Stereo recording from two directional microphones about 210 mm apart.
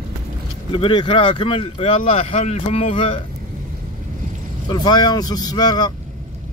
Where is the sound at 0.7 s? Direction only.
25° left (ahead or behind).